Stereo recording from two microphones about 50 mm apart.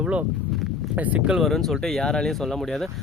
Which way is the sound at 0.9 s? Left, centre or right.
Right.